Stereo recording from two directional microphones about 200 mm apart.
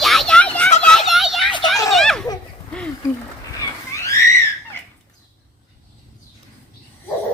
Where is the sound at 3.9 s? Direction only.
15° left (ahead or behind).